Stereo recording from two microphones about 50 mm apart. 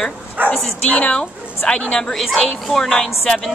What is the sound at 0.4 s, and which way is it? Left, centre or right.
Bow-wow, right.